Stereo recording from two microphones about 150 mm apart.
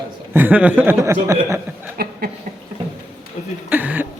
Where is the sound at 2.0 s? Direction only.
85° right.